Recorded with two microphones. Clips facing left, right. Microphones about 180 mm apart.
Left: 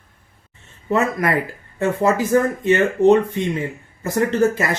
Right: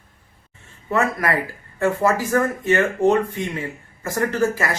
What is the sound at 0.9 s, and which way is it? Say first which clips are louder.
Speech: left 2 dB; 20° left (ahead or behind).